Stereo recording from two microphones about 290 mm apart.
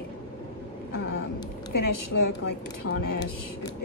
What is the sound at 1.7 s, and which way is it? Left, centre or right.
Speech, left.